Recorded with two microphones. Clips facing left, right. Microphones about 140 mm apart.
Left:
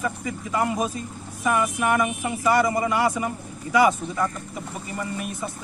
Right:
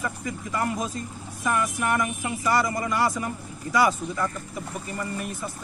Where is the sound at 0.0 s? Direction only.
10° left (ahead or behind).